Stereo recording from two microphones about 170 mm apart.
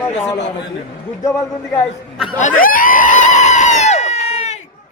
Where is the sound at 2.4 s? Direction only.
55° left (ahead or behind).